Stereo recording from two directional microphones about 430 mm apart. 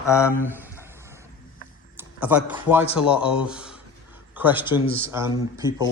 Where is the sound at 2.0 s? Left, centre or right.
Centre.